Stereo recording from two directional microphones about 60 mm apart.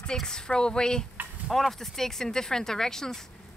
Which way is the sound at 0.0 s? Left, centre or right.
Centre.